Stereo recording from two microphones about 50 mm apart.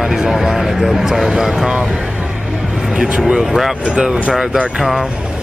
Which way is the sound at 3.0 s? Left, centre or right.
Centre.